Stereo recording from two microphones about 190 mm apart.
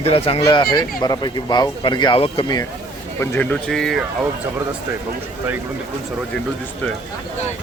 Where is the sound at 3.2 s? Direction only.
10° left (ahead or behind).